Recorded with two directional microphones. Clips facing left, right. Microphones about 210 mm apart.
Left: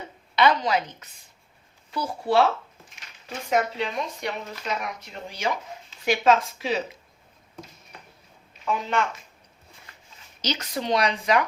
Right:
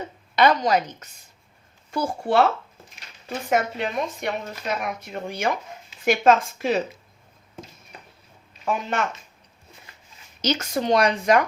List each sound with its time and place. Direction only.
0.3 s speech: 45° right (ahead or behind)
3.5 s speech: 50° right (ahead or behind)
8.6 s speech: 50° right (ahead or behind)
10.4 s speech: 50° right (ahead or behind)